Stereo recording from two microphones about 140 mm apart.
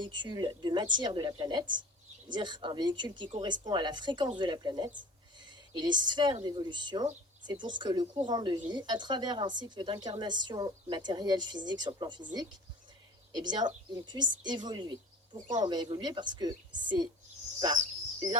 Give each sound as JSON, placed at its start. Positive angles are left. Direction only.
{"t": 0.0, "sound": "a woman's voice", "side_deg": -30}
{"t": 5.4, "sound": "a sound", "side_deg": -30}
{"t": 6.4, "sound": "a woman's voice", "side_deg": -30}
{"t": 13.3, "sound": "a woman's voice", "side_deg": -30}